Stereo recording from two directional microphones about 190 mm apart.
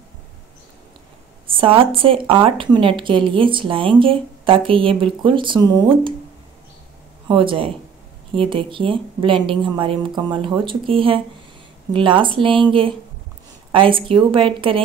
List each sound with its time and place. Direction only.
1.5 s speech: 30° right (ahead or behind)
7.2 s speech: 25° right (ahead or behind)